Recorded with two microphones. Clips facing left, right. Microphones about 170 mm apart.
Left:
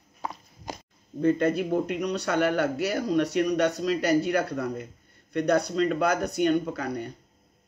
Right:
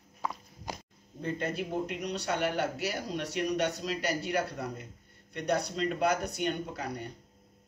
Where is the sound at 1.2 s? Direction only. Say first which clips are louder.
Left 10 dB; 50° left (ahead or behind).